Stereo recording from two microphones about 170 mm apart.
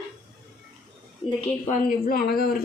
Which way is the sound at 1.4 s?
40° left (ahead or behind).